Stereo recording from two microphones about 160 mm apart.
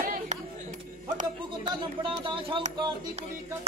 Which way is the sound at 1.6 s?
30° right (ahead or behind).